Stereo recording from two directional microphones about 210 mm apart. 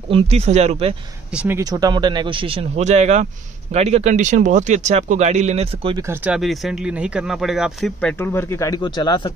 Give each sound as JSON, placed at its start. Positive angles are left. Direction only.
{"t": 0.1, "sound": "speech", "side_deg": -30}
{"t": 1.3, "sound": "speech", "side_deg": -5}
{"t": 1.6, "sound": "speech", "side_deg": -20}
{"t": 6.0, "sound": "speech", "side_deg": -5}